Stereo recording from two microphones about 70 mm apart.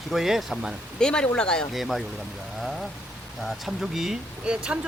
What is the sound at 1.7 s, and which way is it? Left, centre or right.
Speech, centre.